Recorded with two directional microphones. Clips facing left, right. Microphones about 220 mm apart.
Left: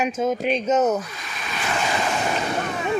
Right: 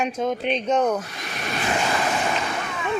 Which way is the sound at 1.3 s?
50° right (ahead or behind).